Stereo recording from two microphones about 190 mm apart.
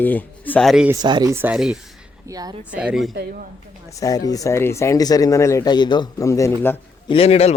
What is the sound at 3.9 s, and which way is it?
Speech, 20° left (ahead or behind).